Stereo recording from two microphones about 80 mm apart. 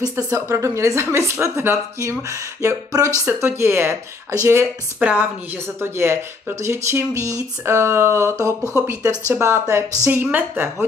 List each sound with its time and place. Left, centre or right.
0.0 s a woman's voice: right
3.3 s a woman's voice: right
5.0 s a woman's voice: right